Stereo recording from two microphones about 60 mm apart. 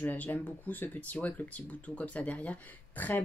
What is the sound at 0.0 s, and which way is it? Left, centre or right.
Speech, left.